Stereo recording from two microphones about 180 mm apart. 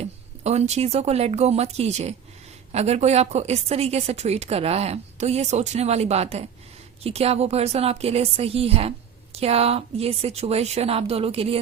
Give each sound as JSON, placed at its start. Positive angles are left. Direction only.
{"t": 0.0, "sound": "a woman's voice", "side_deg": -35}